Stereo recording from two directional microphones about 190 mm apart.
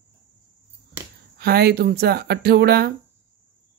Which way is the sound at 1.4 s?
55° right (ahead or behind).